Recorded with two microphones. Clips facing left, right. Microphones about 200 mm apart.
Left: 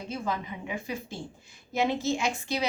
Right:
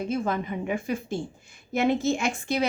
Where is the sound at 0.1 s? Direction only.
50° right (ahead or behind).